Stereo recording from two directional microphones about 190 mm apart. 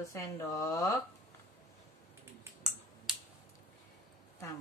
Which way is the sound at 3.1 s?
5° right (ahead or behind).